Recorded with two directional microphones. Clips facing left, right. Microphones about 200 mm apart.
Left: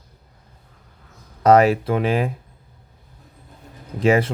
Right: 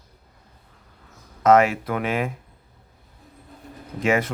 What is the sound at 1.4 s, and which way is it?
Speech, 35° left (ahead or behind).